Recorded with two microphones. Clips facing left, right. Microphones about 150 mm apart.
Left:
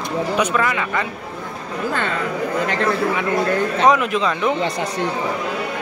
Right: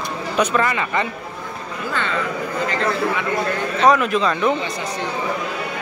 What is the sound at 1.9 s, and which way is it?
Speech, 50° left (ahead or behind).